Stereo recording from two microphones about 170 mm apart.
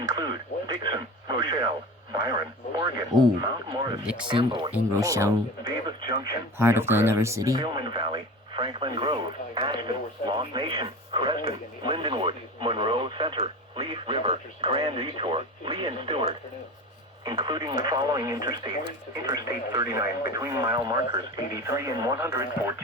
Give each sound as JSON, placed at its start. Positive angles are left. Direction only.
{"t": 0.1, "sound": "radio", "side_deg": -25}
{"t": 0.9, "sound": "speech", "side_deg": -25}
{"t": 3.4, "sound": "speech", "side_deg": -25}
{"t": 4.0, "sound": "speech", "side_deg": -5}
{"t": 4.3, "sound": "speech", "side_deg": -30}
{"t": 4.7, "sound": "speech", "side_deg": -15}
{"t": 6.6, "sound": "speech", "side_deg": -15}